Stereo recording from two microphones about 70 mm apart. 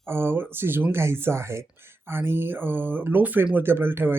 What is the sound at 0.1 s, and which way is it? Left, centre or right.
Speech, right.